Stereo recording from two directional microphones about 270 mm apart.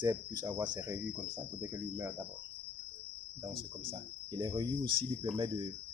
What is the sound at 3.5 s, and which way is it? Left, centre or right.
Speech, right.